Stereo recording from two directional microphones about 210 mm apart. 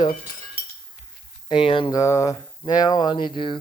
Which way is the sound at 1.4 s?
25° left (ahead or behind).